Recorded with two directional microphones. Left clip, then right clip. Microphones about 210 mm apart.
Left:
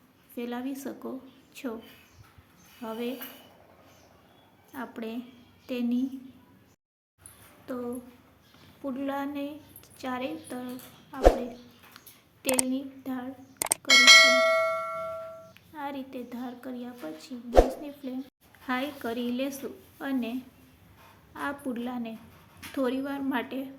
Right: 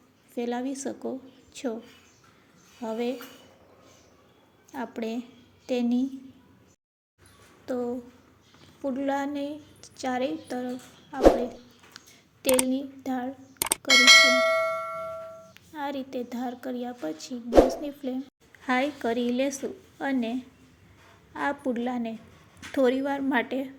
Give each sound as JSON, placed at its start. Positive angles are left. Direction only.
{"t": 0.3, "sound": "a woman's voice", "side_deg": -15}
{"t": 2.8, "sound": "a woman's voice", "side_deg": -15}
{"t": 4.7, "sound": "a woman's voice", "side_deg": -20}
{"t": 7.6, "sound": "a woman's voice", "side_deg": -20}
{"t": 12.6, "sound": "speech", "side_deg": -25}
{"t": 13.6, "sound": "bell", "side_deg": 0}
{"t": 15.7, "sound": "speech", "side_deg": -25}
{"t": 17.5, "sound": "a woman's voice", "side_deg": 0}
{"t": 18.6, "sound": "speech", "side_deg": -20}
{"t": 21.3, "sound": "speech", "side_deg": -20}